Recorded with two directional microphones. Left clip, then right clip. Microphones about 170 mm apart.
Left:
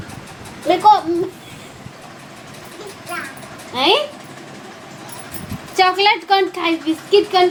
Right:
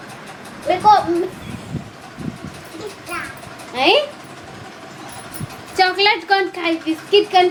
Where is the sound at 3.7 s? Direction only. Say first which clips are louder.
Right 1 dB; 20° left (ahead or behind).